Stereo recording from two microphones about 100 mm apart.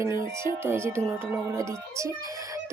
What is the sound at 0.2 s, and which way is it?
A child's voice, 25° right (ahead or behind).